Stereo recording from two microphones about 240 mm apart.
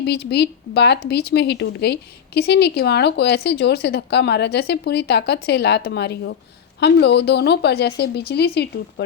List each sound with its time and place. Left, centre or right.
0.0 s speech: left